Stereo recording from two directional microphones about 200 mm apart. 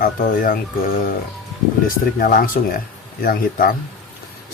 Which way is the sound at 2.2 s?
45° left (ahead or behind).